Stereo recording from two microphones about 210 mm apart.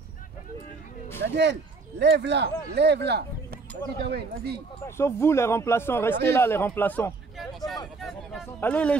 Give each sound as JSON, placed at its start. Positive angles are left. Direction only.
{"t": 1.2, "sound": "speech", "side_deg": -55}
{"t": 4.8, "sound": "a man's voice", "side_deg": 10}
{"t": 8.0, "sound": "a sound", "side_deg": 0}